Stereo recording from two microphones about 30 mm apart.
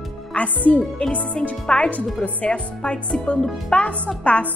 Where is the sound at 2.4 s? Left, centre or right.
Left.